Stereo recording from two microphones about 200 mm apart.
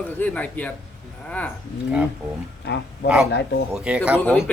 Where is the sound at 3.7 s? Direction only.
5° right (ahead or behind).